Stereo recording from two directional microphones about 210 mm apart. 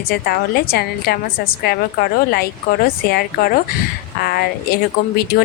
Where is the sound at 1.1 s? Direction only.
50° left (ahead or behind).